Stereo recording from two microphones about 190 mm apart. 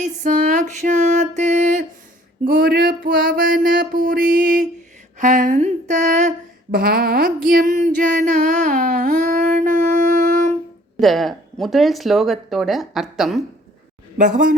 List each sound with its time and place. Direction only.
0.0 s music: 40° right (ahead or behind)
5.1 s a sound: 40° right (ahead or behind)
11.0 s speech: centre (ahead or behind)
14.2 s music: 45° right (ahead or behind)